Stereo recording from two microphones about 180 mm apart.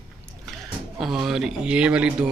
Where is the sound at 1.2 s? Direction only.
Centre (ahead or behind).